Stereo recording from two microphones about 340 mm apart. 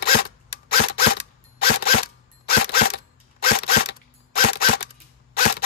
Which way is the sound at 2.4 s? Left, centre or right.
Left.